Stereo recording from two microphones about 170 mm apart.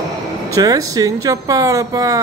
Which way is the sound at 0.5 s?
20° right (ahead or behind).